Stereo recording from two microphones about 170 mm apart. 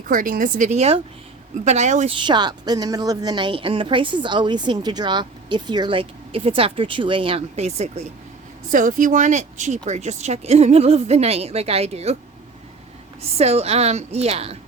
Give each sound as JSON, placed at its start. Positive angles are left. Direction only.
{"t": 0.1, "sound": "a woman's voice", "side_deg": -50}
{"t": 2.2, "sound": "a woman's voice", "side_deg": -25}
{"t": 8.7, "sound": "speech", "side_deg": -50}
{"t": 13.3, "sound": "speech", "side_deg": -40}